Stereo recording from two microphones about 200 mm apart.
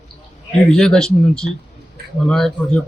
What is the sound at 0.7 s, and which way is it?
Speech, 5° left (ahead or behind).